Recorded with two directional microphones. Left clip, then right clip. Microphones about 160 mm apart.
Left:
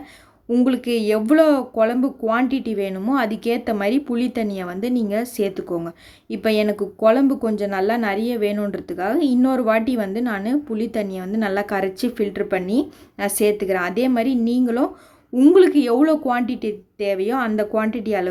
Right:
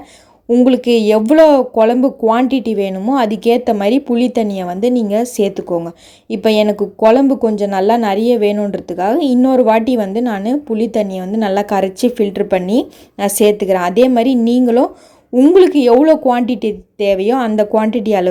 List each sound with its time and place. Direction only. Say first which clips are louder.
0.5 s a woman's voice: right 9 dB; 20° right (ahead or behind)
15.4 s a woman's voice: right 5 dB; 15° right (ahead or behind)